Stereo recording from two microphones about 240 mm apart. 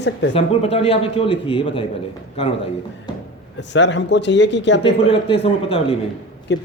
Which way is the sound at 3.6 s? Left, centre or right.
Left.